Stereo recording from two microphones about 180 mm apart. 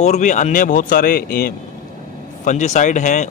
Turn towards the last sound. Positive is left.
turn(degrees=45)  # may be behind; listen again after turning